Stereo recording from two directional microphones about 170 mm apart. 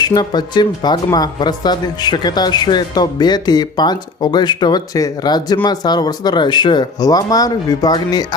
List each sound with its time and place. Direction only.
0.0 s speech: 25° left (ahead or behind)